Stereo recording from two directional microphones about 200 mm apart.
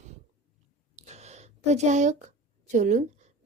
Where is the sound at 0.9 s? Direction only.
35° right (ahead or behind).